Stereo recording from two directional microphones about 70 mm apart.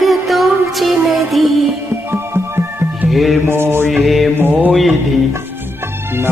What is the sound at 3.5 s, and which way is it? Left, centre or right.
Mantra, right.